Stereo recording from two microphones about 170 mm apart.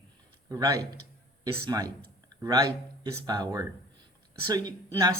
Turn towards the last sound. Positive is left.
turn(degrees=-20)  # may be behind; listen again after turning